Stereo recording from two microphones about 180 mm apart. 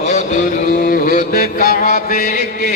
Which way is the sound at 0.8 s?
50° left (ahead or behind).